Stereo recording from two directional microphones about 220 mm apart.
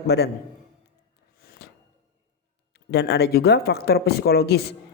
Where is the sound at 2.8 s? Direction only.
50° left (ahead or behind).